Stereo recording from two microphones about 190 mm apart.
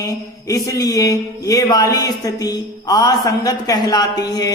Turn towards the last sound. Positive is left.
turn(degrees=20)  # may be behind; listen again after turning